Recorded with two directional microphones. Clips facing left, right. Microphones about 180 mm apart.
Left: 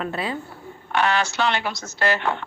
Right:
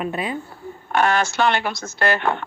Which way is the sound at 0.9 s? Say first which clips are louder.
Right 3 dB; 45° right (ahead or behind).